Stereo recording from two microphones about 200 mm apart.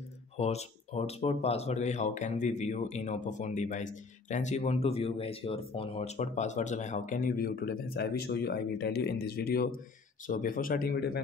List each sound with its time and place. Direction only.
0.4 s speech: 30° left (ahead or behind); by 11.1 s 50° left (ahead or behind)